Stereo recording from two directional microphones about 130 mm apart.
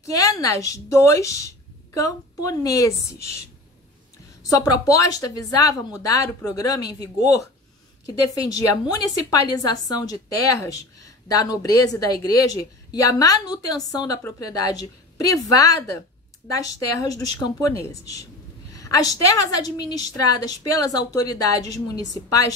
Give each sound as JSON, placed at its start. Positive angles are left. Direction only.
{"t": 0.0, "sound": "a woman's voice", "side_deg": 25}
{"t": 4.4, "sound": "a woman's voice", "side_deg": 25}
{"t": 8.5, "sound": "a woman's voice", "side_deg": 30}